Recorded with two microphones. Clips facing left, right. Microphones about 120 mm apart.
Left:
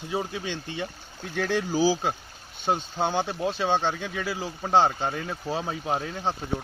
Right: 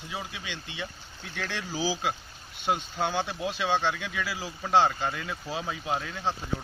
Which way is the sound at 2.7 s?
30° left (ahead or behind).